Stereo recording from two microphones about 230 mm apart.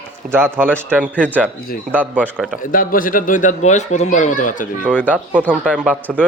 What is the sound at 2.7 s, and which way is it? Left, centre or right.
Speech, left.